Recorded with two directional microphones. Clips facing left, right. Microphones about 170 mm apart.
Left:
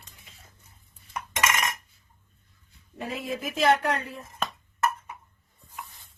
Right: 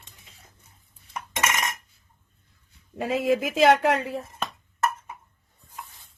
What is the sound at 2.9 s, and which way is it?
Speech, 90° right.